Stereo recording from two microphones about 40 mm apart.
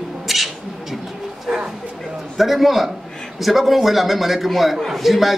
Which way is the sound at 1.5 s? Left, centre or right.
Centre.